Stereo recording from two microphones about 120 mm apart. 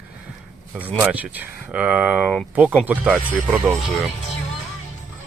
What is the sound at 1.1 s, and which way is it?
Speech, 15° right (ahead or behind).